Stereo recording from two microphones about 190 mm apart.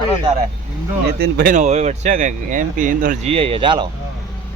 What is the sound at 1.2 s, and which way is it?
Speech, 55° right (ahead or behind).